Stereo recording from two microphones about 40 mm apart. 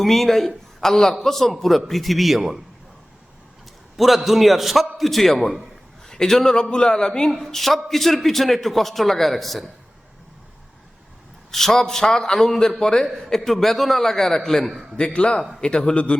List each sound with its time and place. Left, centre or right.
0.0 s a man's voice: centre
3.9 s a man's voice: centre
7.3 s a man's voice: centre
11.5 s a man's voice: centre
14.9 s speech: left